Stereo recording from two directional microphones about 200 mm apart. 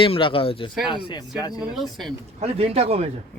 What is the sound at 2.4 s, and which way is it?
Speech, 30° right (ahead or behind).